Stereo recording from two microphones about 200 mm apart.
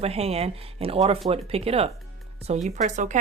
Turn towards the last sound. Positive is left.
turn(degrees=-40)  # may be behind; listen again after turning